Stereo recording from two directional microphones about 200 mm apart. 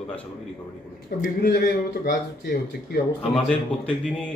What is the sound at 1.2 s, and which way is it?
Speech, 55° left (ahead or behind).